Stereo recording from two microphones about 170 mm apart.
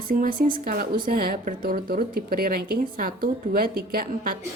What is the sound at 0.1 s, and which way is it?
Speech, 55° right (ahead or behind).